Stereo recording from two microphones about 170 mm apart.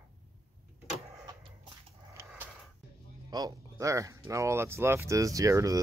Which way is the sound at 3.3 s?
25° right (ahead or behind).